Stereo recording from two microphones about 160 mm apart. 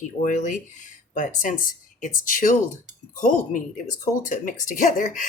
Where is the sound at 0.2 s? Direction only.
50° left (ahead or behind).